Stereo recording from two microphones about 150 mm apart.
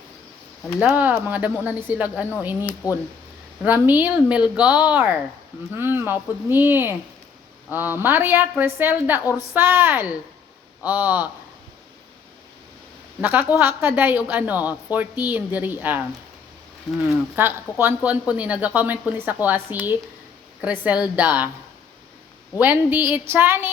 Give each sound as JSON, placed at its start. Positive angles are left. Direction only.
{"t": 0.8, "sound": "a woman's voice", "side_deg": -10}
{"t": 2.6, "sound": "speech", "side_deg": 20}
{"t": 3.6, "sound": "a woman's voice", "side_deg": -10}
{"t": 13.2, "sound": "a woman's voice", "side_deg": -15}
{"t": 17.3, "sound": "a woman's voice", "side_deg": -15}
{"t": 22.5, "sound": "a woman's voice", "side_deg": -10}